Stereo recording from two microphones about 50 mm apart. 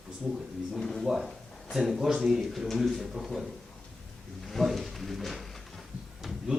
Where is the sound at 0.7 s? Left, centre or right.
Centre.